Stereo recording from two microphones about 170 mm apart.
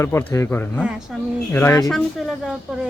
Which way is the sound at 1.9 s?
Centre (ahead or behind).